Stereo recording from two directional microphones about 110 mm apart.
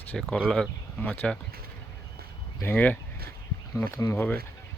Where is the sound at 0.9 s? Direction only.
15° left (ahead or behind).